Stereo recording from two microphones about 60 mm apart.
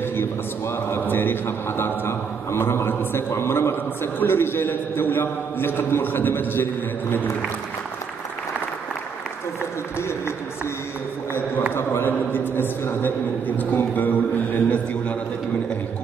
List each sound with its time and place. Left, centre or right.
0.1 s a man's voice: left
9.9 s speech: left
11.7 s a sound: left